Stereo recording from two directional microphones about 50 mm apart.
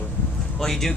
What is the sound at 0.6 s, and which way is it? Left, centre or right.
Speech, centre.